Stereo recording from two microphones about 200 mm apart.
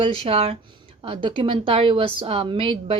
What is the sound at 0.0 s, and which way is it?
A woman's voice, 30° right (ahead or behind).